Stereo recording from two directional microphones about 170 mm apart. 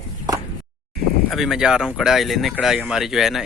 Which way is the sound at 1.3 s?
Centre (ahead or behind).